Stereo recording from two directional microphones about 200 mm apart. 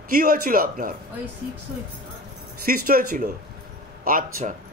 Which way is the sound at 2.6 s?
45° right (ahead or behind).